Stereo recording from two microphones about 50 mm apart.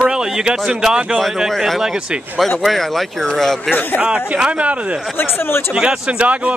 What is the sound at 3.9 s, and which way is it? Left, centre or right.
Speech, centre.